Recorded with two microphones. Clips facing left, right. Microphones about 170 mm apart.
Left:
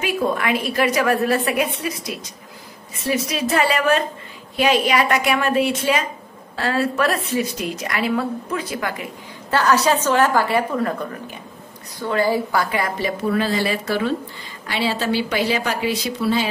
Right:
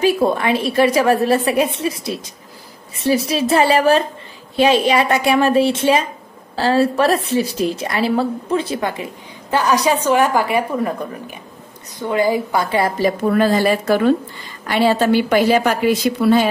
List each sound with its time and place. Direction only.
0.0 s a woman's voice: 30° right (ahead or behind)
9.5 s a woman's voice: 15° right (ahead or behind)
12.7 s a woman's voice: 30° right (ahead or behind)
13.3 s a woman's voice: 50° right (ahead or behind)